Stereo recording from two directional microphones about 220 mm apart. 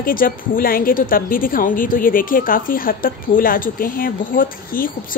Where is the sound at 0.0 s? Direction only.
40° left (ahead or behind).